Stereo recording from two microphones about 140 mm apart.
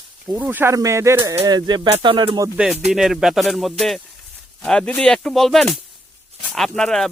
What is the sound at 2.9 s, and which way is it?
Speech, 5° right (ahead or behind).